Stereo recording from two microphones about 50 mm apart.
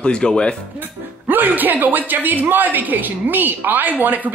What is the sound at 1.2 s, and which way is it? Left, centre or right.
A woman's voice, right.